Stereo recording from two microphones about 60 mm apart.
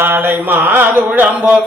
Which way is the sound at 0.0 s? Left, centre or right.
Right.